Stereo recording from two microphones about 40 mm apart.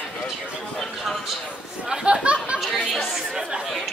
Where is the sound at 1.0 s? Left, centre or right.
Centre.